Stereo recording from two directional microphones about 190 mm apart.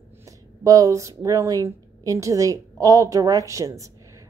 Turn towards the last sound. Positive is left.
turn(degrees=-15)  # may be behind; listen again after turning